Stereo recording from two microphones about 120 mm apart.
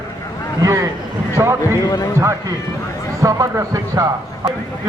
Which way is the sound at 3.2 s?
25° right (ahead or behind).